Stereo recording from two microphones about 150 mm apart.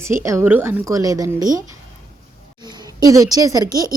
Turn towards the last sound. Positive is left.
turn(degrees=-25)  # may be behind; listen again after turning